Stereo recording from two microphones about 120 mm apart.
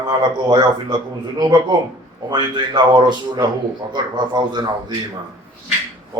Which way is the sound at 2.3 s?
35° right (ahead or behind).